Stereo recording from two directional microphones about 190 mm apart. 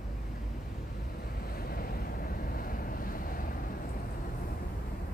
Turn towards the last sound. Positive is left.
turn(degrees=45)  # may be behind; listen again after turning